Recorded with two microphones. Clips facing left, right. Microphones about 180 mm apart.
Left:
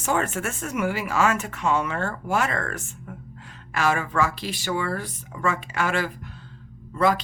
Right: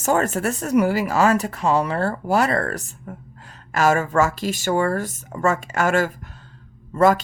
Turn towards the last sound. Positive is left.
turn(degrees=-45)  # may be behind; listen again after turning